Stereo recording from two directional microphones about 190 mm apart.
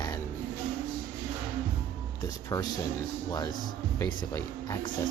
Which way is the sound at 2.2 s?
20° left (ahead or behind).